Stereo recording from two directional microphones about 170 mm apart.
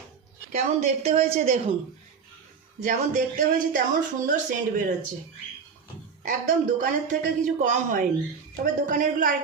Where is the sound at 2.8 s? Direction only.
45° right (ahead or behind).